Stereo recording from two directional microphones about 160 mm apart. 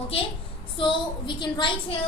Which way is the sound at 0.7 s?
30° left (ahead or behind).